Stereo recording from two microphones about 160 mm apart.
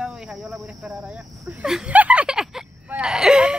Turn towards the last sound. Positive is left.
turn(degrees=-5)  # may be behind; listen again after turning